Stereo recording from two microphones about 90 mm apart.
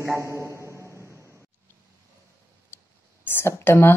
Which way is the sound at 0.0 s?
30° right (ahead or behind).